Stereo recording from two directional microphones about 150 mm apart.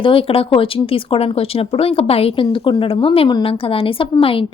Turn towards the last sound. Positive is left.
turn(degrees=35)  # may be behind; listen again after turning